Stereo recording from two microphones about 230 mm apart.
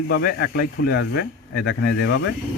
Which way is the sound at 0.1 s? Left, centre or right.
Left.